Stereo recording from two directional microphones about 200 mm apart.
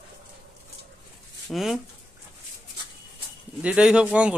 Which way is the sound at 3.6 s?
5° right (ahead or behind).